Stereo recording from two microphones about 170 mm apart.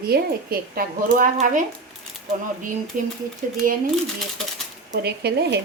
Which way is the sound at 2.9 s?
55° right (ahead or behind).